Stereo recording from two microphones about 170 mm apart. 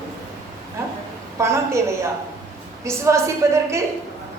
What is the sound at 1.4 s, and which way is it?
Speech, 15° right (ahead or behind).